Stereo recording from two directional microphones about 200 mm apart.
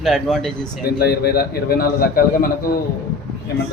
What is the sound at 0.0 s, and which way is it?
Speech, centre (ahead or behind).